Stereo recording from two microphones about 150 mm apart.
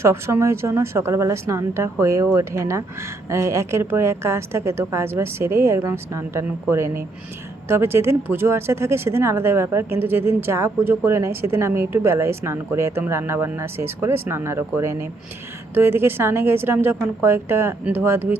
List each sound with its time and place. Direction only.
0.0 s speech: 15° right (ahead or behind)